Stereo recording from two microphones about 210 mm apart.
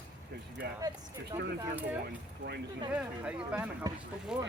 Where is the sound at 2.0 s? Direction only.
50° right (ahead or behind).